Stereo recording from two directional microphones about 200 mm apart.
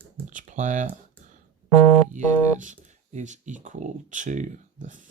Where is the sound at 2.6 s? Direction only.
35° right (ahead or behind).